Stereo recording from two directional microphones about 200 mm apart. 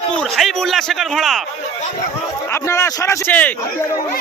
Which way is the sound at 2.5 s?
15° left (ahead or behind).